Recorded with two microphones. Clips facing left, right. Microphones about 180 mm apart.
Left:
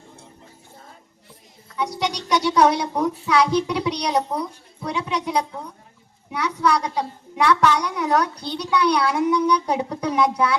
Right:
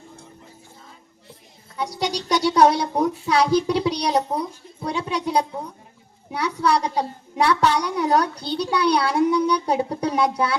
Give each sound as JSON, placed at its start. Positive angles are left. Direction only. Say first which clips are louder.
{"t": 2.0, "sound": "a child's voice", "louder": "right 1 dB", "side_deg": -35}